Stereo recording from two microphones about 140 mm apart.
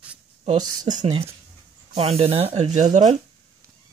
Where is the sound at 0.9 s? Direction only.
55° right (ahead or behind).